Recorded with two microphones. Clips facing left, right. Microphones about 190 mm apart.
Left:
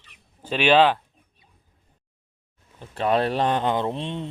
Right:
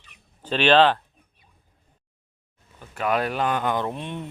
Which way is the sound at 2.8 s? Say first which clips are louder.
Left 2 dB; 30° left (ahead or behind).